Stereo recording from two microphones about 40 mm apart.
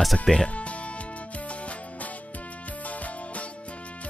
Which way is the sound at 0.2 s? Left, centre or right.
Left.